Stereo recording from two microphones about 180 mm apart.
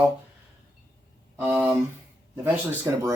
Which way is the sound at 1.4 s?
10° right (ahead or behind).